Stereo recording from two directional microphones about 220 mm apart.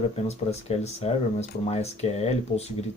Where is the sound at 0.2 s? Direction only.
30° left (ahead or behind).